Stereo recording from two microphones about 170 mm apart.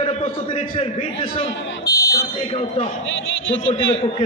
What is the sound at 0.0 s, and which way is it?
A man's voice, 40° left (ahead or behind).